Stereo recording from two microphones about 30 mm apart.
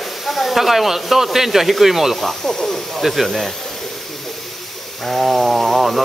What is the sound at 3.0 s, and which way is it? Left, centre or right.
Speech, centre.